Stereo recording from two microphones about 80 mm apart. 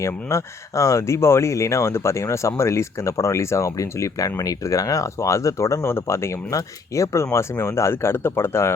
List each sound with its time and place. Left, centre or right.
0.0 s speech: left